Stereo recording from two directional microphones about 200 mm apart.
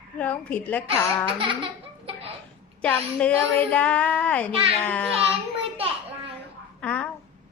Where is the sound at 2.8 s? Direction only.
5° left (ahead or behind).